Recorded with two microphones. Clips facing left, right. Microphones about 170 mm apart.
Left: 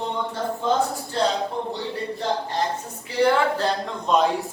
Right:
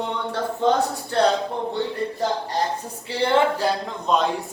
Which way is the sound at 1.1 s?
65° right (ahead or behind).